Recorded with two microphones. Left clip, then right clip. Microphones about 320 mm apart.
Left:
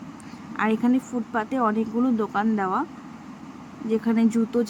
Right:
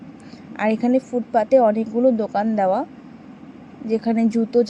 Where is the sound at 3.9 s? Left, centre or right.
Centre.